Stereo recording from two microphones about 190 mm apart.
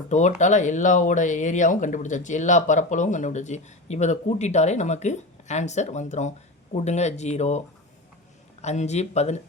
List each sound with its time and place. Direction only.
0.1 s speech: 40° left (ahead or behind)
8.6 s speech: 35° left (ahead or behind)